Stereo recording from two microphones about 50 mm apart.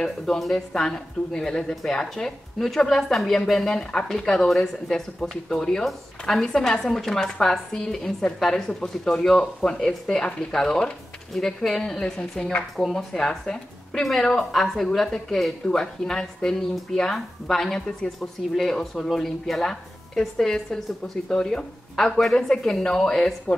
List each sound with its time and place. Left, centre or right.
0.4 s speech: centre